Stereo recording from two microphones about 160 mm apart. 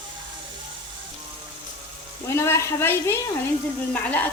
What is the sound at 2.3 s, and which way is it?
Speech, 15° left (ahead or behind).